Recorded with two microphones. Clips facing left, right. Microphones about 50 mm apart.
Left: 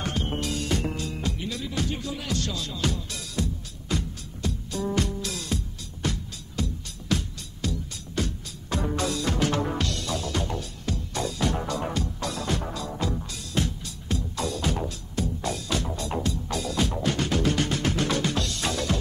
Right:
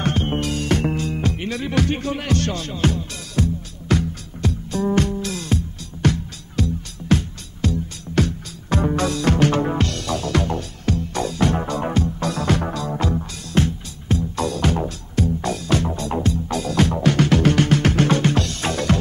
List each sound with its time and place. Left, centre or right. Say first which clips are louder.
0.0 s music: right 7 dB; right
3.9 s music: right 9 dB; right
4.8 s music: right 7 dB; right
6.0 s music: right 10 dB; right
7.1 s music: right 8 dB; right
8.1 s music: right 9 dB; right
9.6 s music: right 6 dB; right
9.9 s music: right 7 dB; right
11.6 s music: right 7 dB; right
12.3 s music: right 8 dB; right
16.5 s music: right 7 dB; right